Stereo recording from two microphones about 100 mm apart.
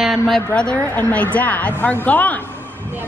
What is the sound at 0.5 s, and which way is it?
A woman's voice, 10° left (ahead or behind).